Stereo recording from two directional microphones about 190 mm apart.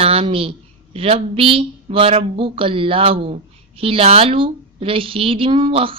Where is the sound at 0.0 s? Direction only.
30° right (ahead or behind).